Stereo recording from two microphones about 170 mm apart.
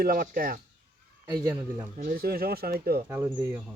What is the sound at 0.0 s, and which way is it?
Speech, 60° right (ahead or behind).